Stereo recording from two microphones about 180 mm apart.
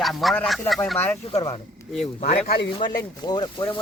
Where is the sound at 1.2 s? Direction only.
30° left (ahead or behind).